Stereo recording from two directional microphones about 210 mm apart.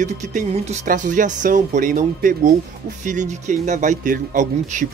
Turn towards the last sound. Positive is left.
turn(degrees=-40)  # may be behind; listen again after turning